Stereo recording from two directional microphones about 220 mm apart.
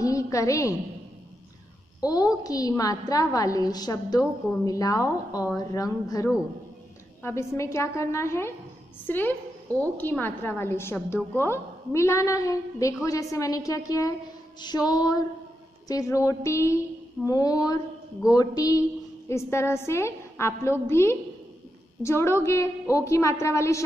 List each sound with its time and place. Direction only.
0.0 s a woman's voice: 15° left (ahead or behind)
2.0 s a woman's voice: 15° left (ahead or behind)